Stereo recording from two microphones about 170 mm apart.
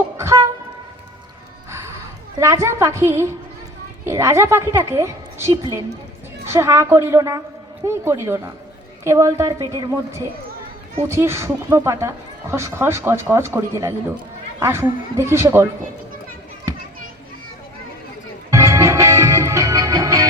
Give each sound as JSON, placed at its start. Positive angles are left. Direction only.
{"t": 0.2, "sound": "a sound", "side_deg": -15}
{"t": 2.4, "sound": "a woman's voice", "side_deg": -15}
{"t": 18.5, "sound": "music", "side_deg": -15}